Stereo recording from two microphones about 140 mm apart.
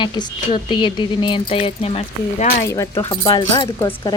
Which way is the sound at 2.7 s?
20° left (ahead or behind).